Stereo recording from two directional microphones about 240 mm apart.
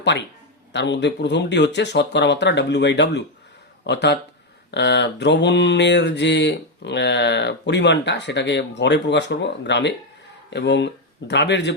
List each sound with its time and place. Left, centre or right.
0.7 s mantra: left
10.5 s speech: left